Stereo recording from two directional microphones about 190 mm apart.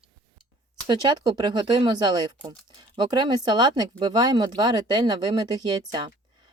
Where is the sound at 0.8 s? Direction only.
20° right (ahead or behind).